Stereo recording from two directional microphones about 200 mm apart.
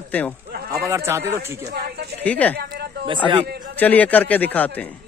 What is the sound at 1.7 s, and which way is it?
Speech, 55° right (ahead or behind).